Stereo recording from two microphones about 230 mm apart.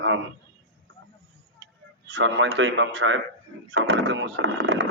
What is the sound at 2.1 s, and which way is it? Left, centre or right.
A man's voice, right.